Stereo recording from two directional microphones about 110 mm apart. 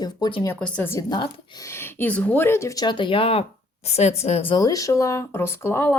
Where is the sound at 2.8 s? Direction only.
45° left (ahead or behind).